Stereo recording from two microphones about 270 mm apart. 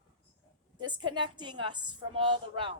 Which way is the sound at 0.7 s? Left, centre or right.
Centre.